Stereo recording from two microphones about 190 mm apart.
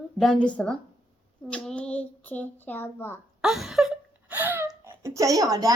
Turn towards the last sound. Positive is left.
turn(degrees=-20)  # may be behind; listen again after turning